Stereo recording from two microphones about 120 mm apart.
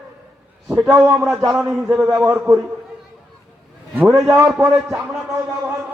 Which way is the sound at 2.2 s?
25° right (ahead or behind).